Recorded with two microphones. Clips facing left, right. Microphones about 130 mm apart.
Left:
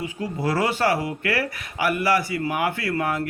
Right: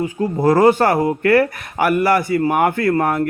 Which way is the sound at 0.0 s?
45° right (ahead or behind).